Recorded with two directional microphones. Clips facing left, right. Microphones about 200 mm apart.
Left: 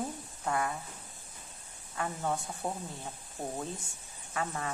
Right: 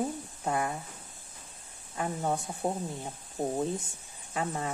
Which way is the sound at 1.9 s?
20° right (ahead or behind).